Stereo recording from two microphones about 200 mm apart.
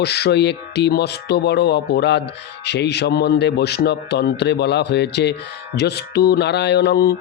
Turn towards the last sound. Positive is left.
turn(degrees=55)  # may be behind; listen again after turning